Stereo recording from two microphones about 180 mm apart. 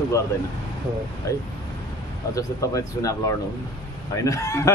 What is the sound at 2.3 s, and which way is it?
Speech, 20° left (ahead or behind).